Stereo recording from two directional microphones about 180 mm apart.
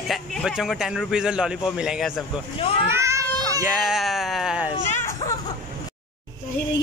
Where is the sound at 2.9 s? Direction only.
15° right (ahead or behind).